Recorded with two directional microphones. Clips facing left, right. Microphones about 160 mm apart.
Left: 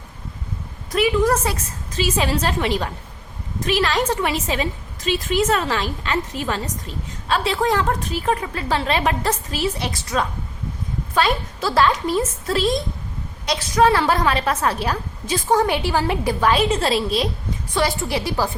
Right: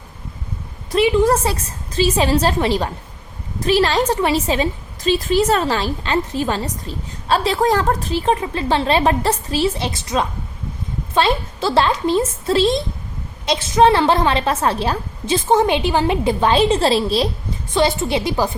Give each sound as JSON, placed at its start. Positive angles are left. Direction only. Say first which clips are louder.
{"t": 0.9, "sound": "a woman's voice", "louder": "right 3 dB", "side_deg": -30}